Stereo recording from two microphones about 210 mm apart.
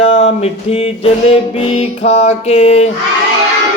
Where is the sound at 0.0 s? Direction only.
65° left (ahead or behind).